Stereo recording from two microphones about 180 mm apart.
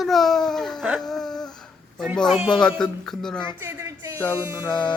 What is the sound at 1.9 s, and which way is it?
Speech, 5° left (ahead or behind).